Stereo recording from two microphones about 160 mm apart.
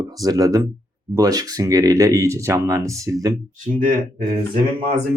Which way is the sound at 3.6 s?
55° right (ahead or behind).